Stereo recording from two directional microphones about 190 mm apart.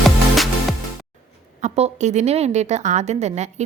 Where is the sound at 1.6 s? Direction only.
40° right (ahead or behind).